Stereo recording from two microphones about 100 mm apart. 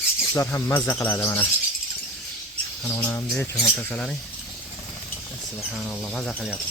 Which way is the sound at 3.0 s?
15° left (ahead or behind).